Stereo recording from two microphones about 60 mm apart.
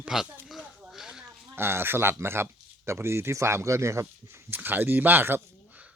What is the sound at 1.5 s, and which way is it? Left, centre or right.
Speech, right.